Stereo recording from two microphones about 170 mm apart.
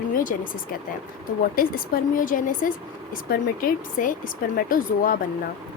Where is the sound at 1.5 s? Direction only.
55° left (ahead or behind).